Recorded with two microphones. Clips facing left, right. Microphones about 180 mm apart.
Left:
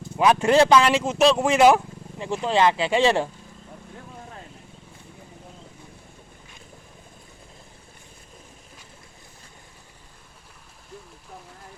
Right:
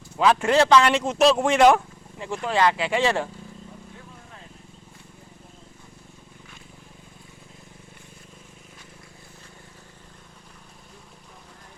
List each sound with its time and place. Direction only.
0.2 s speech: 20° left (ahead or behind)
2.1 s speech: 20° left (ahead or behind)